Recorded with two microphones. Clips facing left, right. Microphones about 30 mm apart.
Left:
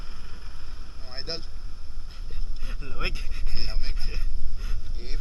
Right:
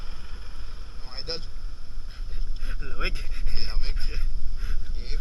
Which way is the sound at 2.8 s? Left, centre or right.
Centre.